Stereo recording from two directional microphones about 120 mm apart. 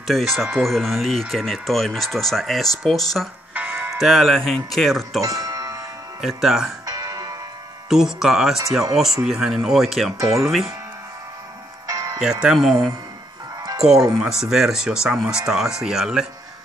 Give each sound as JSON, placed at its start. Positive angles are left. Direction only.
{"t": 0.0, "sound": "speech", "side_deg": 0}
{"t": 3.5, "sound": "music", "side_deg": -10}
{"t": 4.0, "sound": "speech", "side_deg": 0}
{"t": 5.2, "sound": "music", "side_deg": -30}
{"t": 6.2, "sound": "speech", "side_deg": 0}
{"t": 6.9, "sound": "music", "side_deg": -30}
{"t": 7.9, "sound": "speech", "side_deg": -5}
{"t": 10.1, "sound": "speech", "side_deg": -25}
{"t": 11.9, "sound": "music", "side_deg": -30}
{"t": 12.2, "sound": "speech", "side_deg": -5}
{"t": 13.7, "sound": "speech", "side_deg": -5}